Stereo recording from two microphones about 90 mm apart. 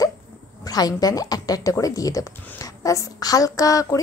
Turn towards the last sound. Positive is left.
turn(degrees=40)  # may be behind; listen again after turning